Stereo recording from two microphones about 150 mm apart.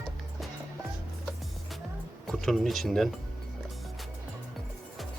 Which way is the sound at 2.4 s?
Centre (ahead or behind).